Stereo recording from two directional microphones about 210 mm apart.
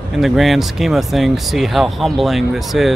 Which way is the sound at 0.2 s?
Centre (ahead or behind).